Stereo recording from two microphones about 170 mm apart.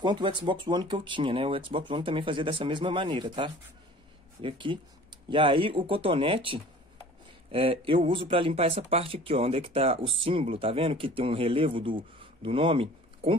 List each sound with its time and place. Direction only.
0.0 s speech: 30° right (ahead or behind)